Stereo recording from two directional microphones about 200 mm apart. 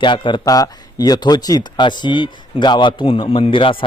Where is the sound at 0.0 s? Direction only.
25° left (ahead or behind).